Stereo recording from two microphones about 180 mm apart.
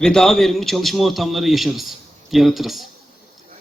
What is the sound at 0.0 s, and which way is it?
Speech, 5° left (ahead or behind).